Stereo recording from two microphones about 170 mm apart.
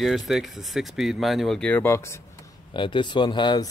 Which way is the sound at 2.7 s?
30° left (ahead or behind).